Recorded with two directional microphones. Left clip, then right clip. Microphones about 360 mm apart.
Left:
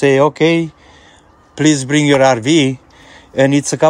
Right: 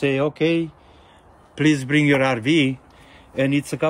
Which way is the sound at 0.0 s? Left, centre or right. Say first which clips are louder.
Left 9 dB; centre.